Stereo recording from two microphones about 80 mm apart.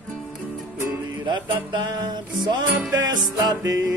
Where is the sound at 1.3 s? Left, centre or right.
Right.